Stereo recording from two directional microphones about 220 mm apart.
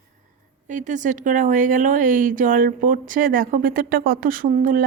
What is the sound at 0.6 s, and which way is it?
Speech, 35° right (ahead or behind).